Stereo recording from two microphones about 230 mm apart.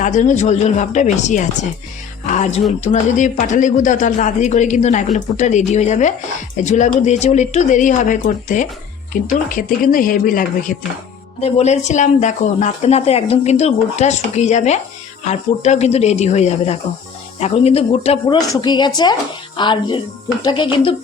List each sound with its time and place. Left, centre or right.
0.0 s speech: left